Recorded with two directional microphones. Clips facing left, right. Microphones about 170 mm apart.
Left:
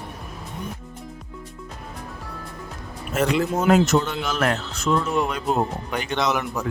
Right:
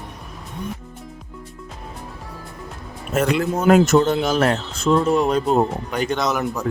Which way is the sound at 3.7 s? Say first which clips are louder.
Right 6 dB; 45° right (ahead or behind).